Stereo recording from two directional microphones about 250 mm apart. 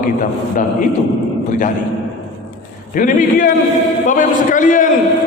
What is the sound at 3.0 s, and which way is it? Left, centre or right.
A man's voice, left.